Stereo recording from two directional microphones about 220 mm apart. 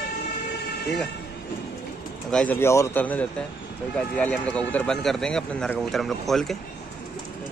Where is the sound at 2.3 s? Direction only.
5° left (ahead or behind).